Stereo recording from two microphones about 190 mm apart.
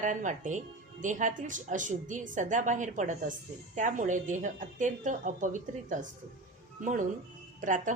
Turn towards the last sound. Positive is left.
turn(degrees=-40)  # may be behind; listen again after turning